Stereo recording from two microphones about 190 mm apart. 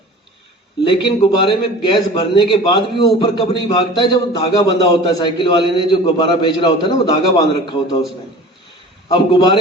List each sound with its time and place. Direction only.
0.9 s a man's voice: 25° left (ahead or behind)
9.0 s a man's voice: 25° left (ahead or behind)